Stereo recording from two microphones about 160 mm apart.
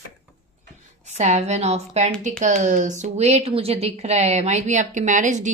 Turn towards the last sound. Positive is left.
turn(degrees=-50)  # may be behind; listen again after turning